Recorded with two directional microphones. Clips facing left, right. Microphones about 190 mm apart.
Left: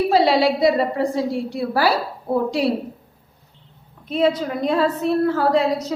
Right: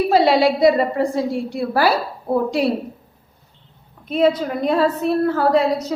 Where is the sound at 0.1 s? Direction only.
55° right (ahead or behind).